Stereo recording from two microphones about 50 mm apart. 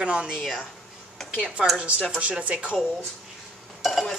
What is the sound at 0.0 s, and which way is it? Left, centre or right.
Speech, centre.